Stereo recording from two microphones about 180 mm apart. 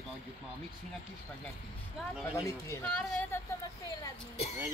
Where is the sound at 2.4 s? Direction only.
15° left (ahead or behind).